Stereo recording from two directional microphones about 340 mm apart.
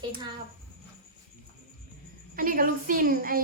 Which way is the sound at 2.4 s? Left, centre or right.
Right.